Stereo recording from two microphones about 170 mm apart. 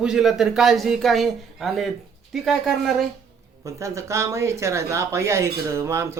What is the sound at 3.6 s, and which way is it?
Speech, 20° right (ahead or behind).